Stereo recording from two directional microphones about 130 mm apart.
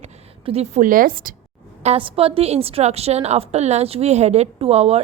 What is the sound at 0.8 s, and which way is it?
Speech, 90° right.